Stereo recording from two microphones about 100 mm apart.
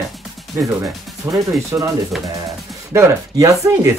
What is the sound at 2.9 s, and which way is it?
Speech, 30° right (ahead or behind).